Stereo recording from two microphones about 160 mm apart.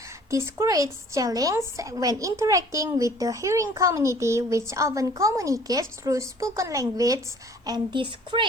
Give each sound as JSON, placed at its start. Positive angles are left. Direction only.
{"t": 0.3, "sound": "a woman's voice", "side_deg": -20}